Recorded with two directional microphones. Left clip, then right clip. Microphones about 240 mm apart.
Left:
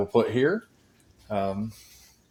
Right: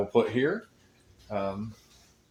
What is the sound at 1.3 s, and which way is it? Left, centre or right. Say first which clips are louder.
Speech: left 4 dB; left.